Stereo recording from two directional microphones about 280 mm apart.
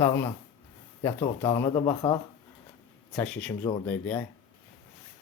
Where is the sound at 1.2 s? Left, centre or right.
Centre.